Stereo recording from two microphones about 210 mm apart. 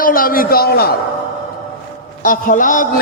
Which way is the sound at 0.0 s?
40° left (ahead or behind).